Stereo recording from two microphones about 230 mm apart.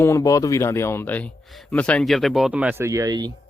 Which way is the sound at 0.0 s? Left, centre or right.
Centre.